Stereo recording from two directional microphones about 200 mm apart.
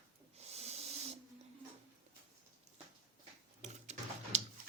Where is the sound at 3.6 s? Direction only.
35° right (ahead or behind).